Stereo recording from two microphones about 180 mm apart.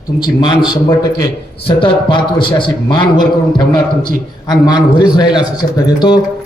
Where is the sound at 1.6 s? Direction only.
25° left (ahead or behind).